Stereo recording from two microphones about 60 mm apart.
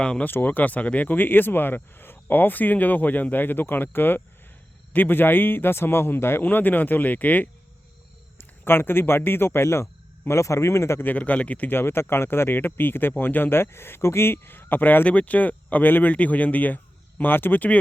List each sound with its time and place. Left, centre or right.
0.0 s speech: centre
0.3 s speech: left
6.4 s speech: left
8.4 s speech: left
11.0 s speech: left
11.7 s speech: left